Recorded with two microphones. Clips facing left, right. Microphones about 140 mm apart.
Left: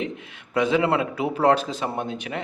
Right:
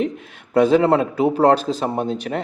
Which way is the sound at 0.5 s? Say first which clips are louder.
Right 6 dB; 40° right (ahead or behind).